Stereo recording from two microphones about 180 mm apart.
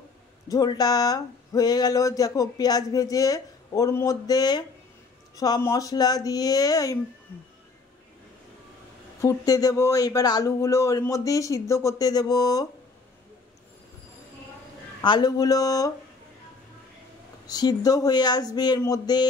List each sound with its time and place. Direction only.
0.5 s speech: 20° left (ahead or behind)
9.2 s speech: 20° left (ahead or behind)
15.0 s speech: 25° left (ahead or behind)
17.5 s speech: 20° left (ahead or behind)